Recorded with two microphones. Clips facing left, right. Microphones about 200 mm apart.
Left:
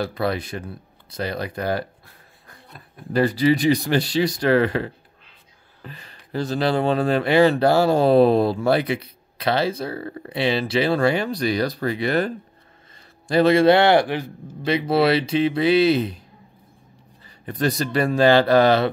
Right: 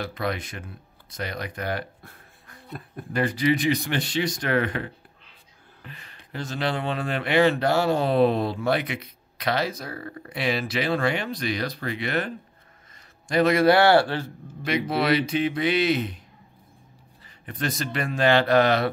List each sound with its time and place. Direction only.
0.0 s speech: 35° left (ahead or behind)
3.1 s speech: 35° left (ahead or behind)
13.3 s a man's voice: 30° left (ahead or behind); by 14.3 s 15° left (ahead or behind)
14.6 s speech: 30° left (ahead or behind)
17.5 s speech: 35° left (ahead or behind)